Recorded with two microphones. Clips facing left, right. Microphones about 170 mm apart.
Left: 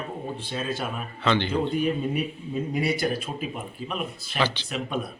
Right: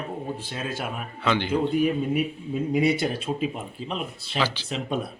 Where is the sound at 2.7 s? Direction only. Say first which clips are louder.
Right 3 dB; 20° right (ahead or behind).